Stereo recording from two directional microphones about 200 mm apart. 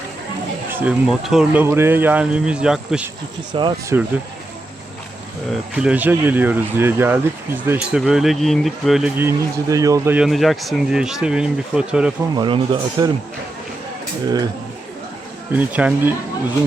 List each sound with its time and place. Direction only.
0.7 s speech: 5° right (ahead or behind)
3.5 s speech: 20° right (ahead or behind)
5.7 s speech: 5° right (ahead or behind)
12.4 s speech: 25° right (ahead or behind)
14.3 s speech: 20° right (ahead or behind)
15.5 s speech: 10° right (ahead or behind)